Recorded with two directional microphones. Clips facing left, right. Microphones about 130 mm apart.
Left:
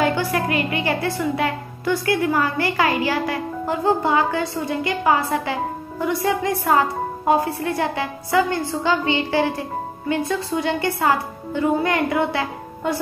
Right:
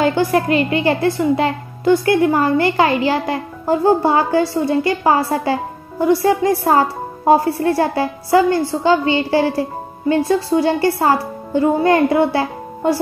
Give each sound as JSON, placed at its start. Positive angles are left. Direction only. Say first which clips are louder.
{"t": 0.0, "sound": "a woman's voice", "louder": "right 5 dB", "side_deg": -30}